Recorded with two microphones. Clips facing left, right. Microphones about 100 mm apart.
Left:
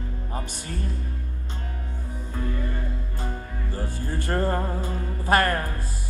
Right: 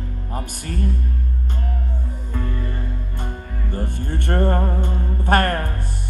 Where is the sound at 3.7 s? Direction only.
60° right (ahead or behind).